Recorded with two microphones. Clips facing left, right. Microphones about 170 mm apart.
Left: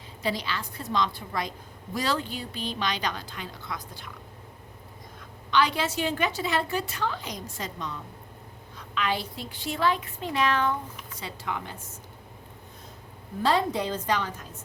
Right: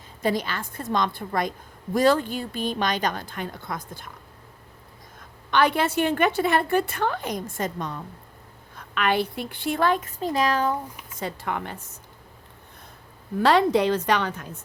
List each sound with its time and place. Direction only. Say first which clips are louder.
0.2 s a woman's voice: right 5 dB; 50° right (ahead or behind)
5.5 s a woman's voice: right 4 dB; 55° right (ahead or behind)
11.2 s a woman's voice: right 5 dB; 50° right (ahead or behind)
13.4 s a woman's voice: right 6 dB; 70° right (ahead or behind)